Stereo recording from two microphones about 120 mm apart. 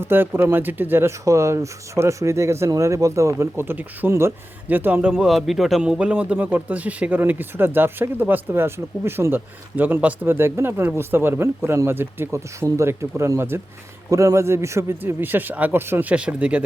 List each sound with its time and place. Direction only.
0.0 s speech: 20° right (ahead or behind)
5.1 s a man's voice: centre (ahead or behind)